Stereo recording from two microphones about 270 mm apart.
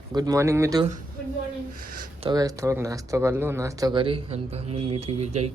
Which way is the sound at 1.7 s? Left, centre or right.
Right.